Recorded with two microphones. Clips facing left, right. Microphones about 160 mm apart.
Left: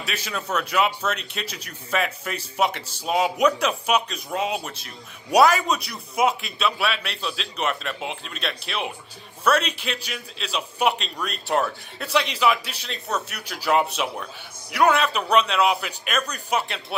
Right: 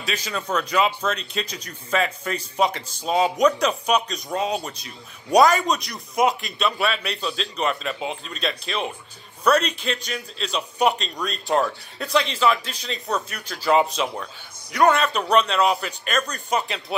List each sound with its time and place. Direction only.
0.0 s speech: 5° left (ahead or behind)